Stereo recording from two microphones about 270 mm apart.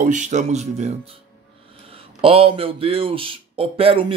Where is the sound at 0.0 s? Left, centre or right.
Right.